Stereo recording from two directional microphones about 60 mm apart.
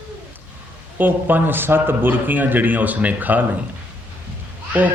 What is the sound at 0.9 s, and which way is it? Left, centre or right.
Speech, right.